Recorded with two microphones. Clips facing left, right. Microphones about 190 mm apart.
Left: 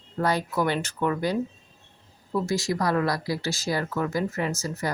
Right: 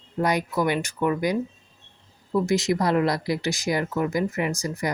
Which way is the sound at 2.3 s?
20° right (ahead or behind).